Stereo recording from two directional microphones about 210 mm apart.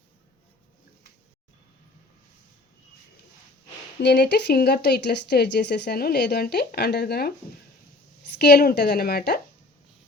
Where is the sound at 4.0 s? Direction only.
55° left (ahead or behind).